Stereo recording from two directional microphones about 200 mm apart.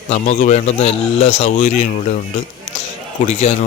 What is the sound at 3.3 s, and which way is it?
Speech, 35° left (ahead or behind).